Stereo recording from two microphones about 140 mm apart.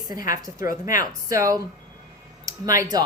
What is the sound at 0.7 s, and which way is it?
Speech, 70° left (ahead or behind).